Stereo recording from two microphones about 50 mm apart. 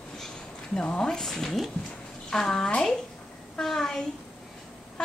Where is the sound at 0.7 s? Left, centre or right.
Centre.